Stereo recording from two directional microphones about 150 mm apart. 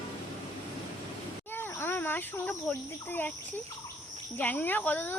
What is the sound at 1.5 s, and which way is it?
A woman's voice, 15° left (ahead or behind).